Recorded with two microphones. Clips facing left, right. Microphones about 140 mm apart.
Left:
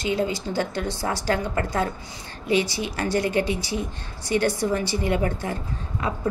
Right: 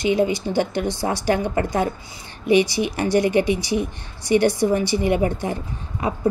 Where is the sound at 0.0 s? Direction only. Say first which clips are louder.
Right 5 dB; 15° right (ahead or behind).